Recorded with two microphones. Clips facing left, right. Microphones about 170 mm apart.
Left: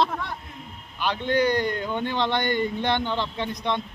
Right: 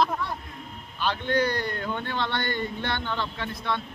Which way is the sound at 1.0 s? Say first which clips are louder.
Left 2 dB; 15° left (ahead or behind).